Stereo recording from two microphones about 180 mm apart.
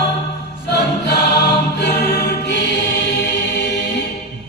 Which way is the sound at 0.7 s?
65° left (ahead or behind).